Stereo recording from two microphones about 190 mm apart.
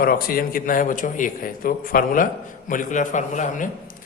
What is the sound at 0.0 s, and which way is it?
A man's voice, 50° left (ahead or behind).